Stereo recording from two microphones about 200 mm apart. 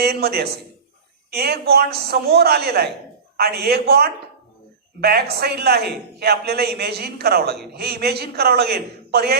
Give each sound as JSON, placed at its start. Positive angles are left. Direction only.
{"t": 0.0, "sound": "a man's voice", "side_deg": -50}